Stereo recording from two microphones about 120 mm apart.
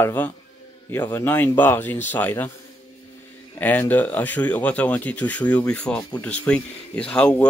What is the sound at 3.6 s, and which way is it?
Speech, 15° left (ahead or behind).